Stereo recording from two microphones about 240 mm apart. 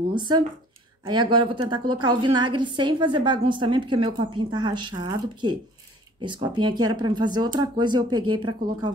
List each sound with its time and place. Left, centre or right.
0.1 s a woman's voice: centre